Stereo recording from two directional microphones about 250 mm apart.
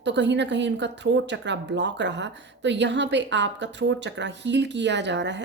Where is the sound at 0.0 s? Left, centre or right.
Right.